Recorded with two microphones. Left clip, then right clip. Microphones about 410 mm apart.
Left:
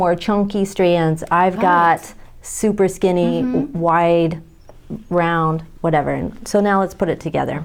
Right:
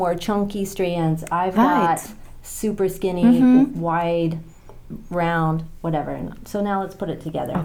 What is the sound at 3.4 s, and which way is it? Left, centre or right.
Speech, right.